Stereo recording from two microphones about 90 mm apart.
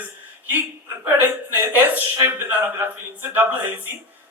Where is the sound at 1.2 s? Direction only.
20° right (ahead or behind).